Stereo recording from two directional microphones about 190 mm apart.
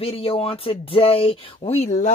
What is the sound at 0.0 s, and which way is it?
Speech, 30° left (ahead or behind).